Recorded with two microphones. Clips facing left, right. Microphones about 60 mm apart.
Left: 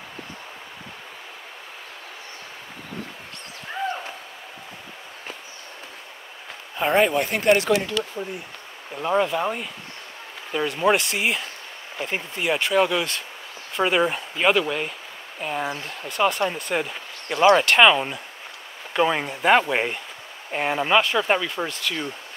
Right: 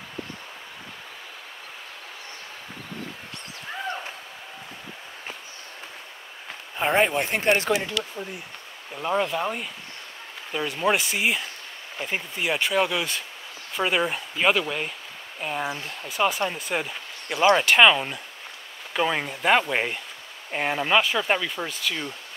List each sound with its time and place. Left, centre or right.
6.8 s speech: centre
8.2 s speech: centre